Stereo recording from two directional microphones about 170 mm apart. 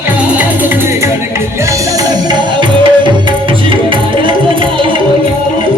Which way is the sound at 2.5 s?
25° right (ahead or behind).